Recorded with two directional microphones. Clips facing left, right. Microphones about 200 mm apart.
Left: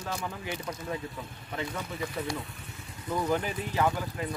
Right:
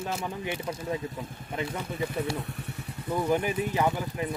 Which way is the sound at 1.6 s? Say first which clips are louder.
Right 3 dB; 25° right (ahead or behind).